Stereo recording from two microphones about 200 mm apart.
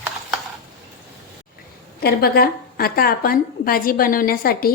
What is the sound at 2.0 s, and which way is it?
A woman's voice, 50° left (ahead or behind).